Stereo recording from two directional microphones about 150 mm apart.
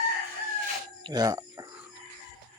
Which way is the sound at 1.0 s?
25° right (ahead or behind).